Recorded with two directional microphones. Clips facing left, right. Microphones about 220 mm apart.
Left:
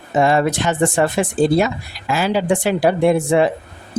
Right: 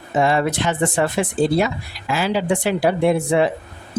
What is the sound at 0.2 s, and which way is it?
Speech, 45° left (ahead or behind).